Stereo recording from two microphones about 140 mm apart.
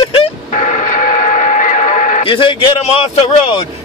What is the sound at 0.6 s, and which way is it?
Radio, 60° left (ahead or behind).